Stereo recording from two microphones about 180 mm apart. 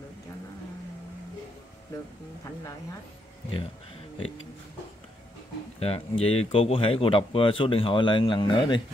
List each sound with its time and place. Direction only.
5.8 s speech: 35° left (ahead or behind)